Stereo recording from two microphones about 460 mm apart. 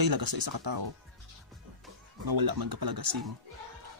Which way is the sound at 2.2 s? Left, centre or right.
Right.